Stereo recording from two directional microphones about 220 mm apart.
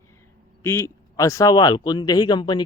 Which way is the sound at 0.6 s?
10° left (ahead or behind).